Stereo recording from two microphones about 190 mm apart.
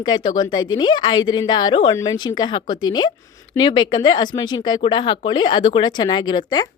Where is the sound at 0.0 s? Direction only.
25° left (ahead or behind).